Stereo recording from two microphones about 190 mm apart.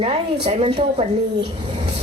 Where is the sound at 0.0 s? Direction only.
30° right (ahead or behind).